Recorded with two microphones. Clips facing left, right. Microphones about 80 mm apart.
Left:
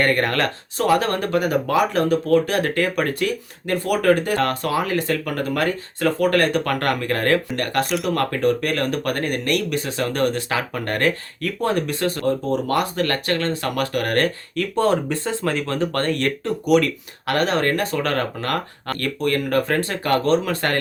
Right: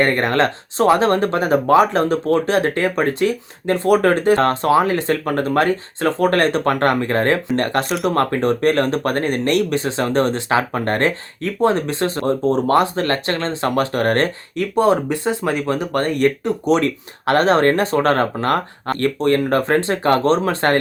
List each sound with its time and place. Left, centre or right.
0.0 s speech: right
14.5 s speech: centre
16.6 s speech: right